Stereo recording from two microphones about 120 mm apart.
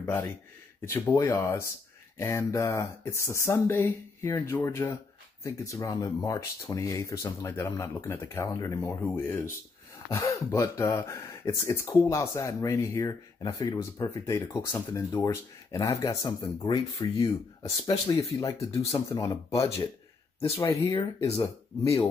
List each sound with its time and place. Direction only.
0.0 s speech: 20° left (ahead or behind)
1.1 s speech: 25° left (ahead or behind)
10.0 s speech: 25° left (ahead or behind)